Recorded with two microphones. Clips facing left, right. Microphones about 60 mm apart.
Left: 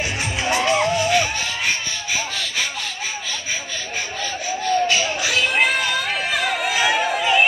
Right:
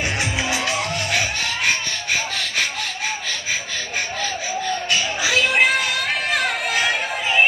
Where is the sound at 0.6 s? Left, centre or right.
Right.